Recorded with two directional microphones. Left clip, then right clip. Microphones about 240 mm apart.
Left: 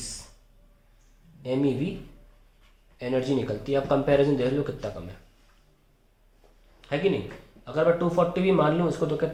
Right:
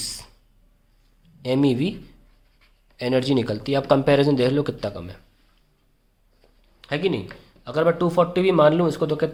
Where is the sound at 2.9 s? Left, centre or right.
Right.